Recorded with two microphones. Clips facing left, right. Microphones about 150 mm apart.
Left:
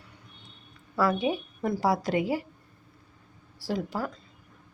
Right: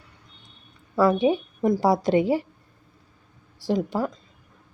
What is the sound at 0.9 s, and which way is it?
A woman's voice, 25° right (ahead or behind).